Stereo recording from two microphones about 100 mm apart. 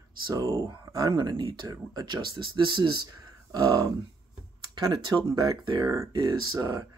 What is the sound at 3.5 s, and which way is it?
Speech, 40° right (ahead or behind).